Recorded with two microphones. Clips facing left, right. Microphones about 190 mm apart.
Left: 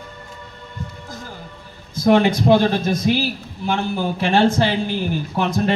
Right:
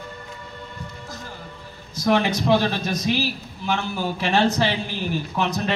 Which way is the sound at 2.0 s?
50° left (ahead or behind).